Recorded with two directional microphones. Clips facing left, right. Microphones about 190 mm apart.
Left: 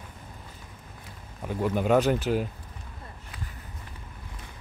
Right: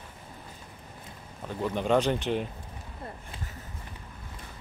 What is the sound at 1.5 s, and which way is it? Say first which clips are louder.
Speech: left 3 dB; 10° left (ahead or behind).